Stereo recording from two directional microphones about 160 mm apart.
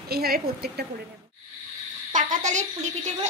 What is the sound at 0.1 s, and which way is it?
Speech, 75° right (ahead or behind).